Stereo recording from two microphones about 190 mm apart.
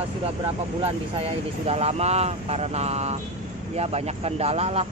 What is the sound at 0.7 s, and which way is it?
Speech, 30° right (ahead or behind).